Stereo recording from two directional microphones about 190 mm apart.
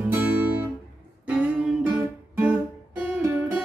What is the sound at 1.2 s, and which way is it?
Music, 5° right (ahead or behind).